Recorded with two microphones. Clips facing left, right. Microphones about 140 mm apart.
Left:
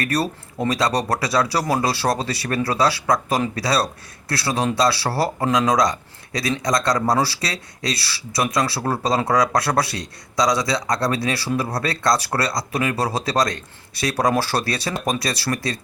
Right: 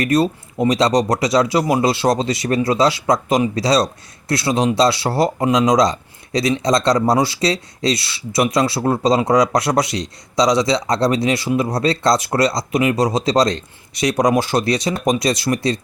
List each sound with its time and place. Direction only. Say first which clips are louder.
0.0 s speech: right 6 dB; 20° right (ahead or behind)